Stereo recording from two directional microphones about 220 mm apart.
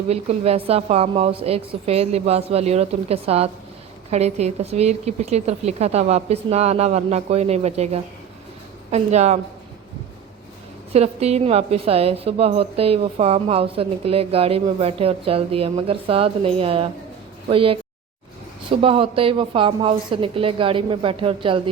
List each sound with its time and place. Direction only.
0.1 s a woman's voice: 30° right (ahead or behind)
8.9 s a woman's voice: 30° right (ahead or behind)
10.9 s a woman's voice: 30° right (ahead or behind)
18.8 s a woman's voice: 25° right (ahead or behind)